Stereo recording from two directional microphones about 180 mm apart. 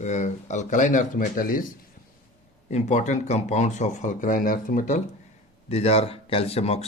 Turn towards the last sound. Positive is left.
turn(degrees=35)  # may be behind; listen again after turning